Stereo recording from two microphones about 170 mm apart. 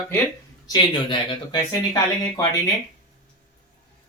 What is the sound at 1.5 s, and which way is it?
Speech, 25° left (ahead or behind).